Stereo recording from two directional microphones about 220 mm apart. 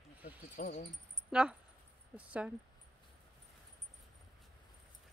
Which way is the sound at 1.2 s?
5° right (ahead or behind).